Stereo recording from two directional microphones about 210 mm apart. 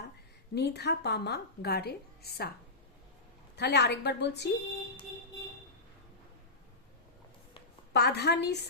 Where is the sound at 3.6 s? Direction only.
55° left (ahead or behind).